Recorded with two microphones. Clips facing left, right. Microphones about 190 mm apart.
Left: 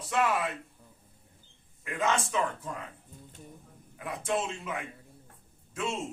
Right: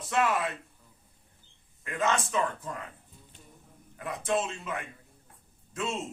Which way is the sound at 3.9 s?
10° left (ahead or behind).